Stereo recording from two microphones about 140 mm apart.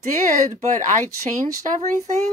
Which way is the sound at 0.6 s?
60° right (ahead or behind).